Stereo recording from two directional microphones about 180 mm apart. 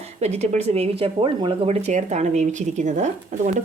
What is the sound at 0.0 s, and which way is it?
Speech, 35° right (ahead or behind).